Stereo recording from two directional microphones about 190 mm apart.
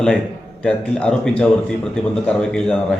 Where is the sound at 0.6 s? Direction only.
5° left (ahead or behind).